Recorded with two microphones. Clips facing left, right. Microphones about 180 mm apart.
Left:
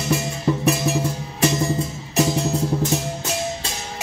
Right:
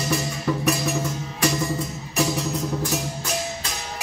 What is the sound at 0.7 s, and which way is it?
Music, 30° left (ahead or behind).